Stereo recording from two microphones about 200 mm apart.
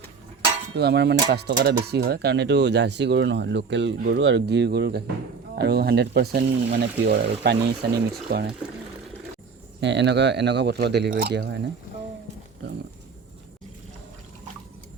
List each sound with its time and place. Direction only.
0.8 s speech: 55° right (ahead or behind)
9.8 s speech: 60° right (ahead or behind)